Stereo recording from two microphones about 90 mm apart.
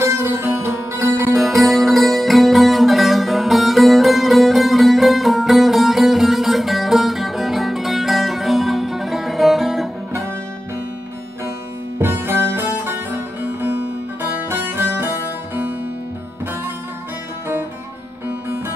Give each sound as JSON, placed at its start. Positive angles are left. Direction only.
{"t": 0.0, "sound": "music", "side_deg": -30}
{"t": 1.3, "sound": "music", "side_deg": 0}
{"t": 12.0, "sound": "music", "side_deg": -25}
{"t": 14.5, "sound": "music", "side_deg": -25}